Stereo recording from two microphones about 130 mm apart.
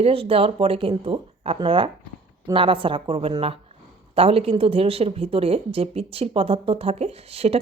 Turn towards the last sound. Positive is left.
turn(degrees=-50)  # may be behind; listen again after turning